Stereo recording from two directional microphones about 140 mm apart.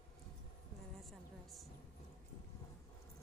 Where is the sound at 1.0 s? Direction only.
Centre (ahead or behind).